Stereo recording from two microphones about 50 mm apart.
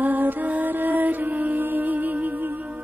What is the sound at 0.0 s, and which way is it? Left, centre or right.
Music, right.